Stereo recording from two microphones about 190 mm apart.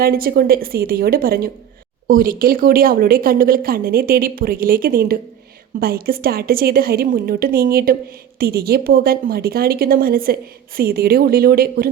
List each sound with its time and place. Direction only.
0.0 s a woman's voice: 50° right (ahead or behind)